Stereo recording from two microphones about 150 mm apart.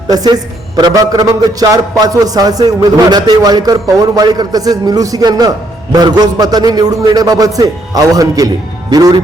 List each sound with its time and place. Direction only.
0.1 s a man's voice: 25° right (ahead or behind)